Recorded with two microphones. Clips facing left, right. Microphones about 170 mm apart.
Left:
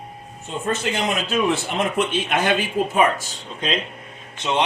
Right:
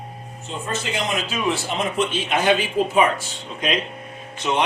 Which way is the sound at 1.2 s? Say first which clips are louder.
Left 3 dB; 55° left (ahead or behind).